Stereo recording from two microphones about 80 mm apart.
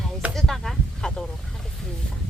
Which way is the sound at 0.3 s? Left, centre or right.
Centre.